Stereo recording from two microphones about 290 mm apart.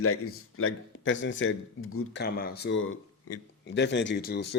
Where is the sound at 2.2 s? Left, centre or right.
Left.